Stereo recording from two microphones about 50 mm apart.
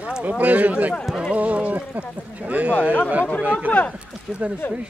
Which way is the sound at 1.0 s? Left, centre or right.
Centre.